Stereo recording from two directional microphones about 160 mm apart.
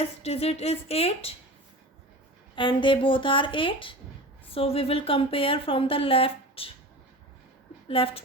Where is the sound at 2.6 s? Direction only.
30° left (ahead or behind).